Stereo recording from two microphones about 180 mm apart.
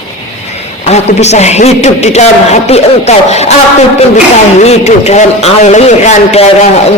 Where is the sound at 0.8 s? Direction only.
35° left (ahead or behind).